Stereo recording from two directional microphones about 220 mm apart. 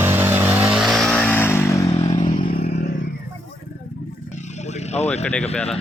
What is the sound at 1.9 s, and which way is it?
Motorcycle, 25° left (ahead or behind).